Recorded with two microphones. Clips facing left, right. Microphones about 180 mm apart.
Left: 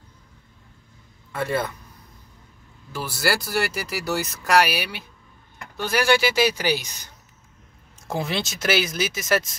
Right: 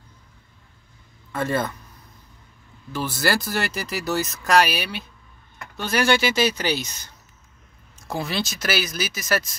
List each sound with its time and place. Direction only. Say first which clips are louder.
1.3 s speech: right 1 dB; 10° left (ahead or behind)
2.9 s speech: right 1 dB; 10° left (ahead or behind)
8.1 s speech: even; 25° left (ahead or behind)